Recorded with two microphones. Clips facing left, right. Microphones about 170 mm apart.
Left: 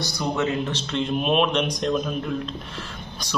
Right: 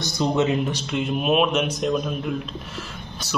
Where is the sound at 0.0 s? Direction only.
20° right (ahead or behind).